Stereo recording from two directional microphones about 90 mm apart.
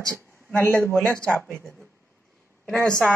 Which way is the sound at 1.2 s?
10° left (ahead or behind).